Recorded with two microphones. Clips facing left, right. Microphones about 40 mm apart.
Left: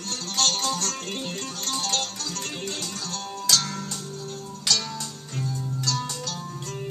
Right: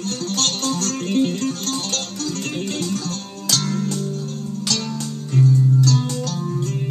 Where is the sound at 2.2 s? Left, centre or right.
Right.